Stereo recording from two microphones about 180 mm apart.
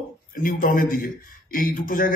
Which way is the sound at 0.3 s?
50° left (ahead or behind).